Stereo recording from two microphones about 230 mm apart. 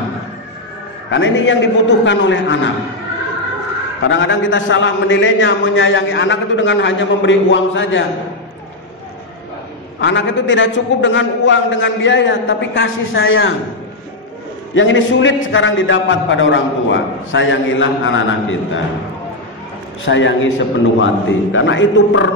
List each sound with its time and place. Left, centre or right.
1.1 s a man's voice: left
4.0 s a man's voice: left
9.9 s a man's voice: left
14.8 s a man's voice: left
20.1 s a man's voice: left